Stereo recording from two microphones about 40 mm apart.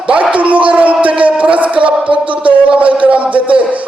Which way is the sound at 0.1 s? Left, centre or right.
Right.